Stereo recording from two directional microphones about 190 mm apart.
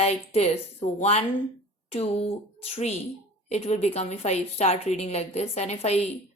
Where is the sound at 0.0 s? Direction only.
30° left (ahead or behind).